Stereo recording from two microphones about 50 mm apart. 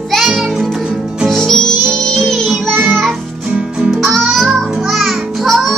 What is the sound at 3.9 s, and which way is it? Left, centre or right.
Music, centre.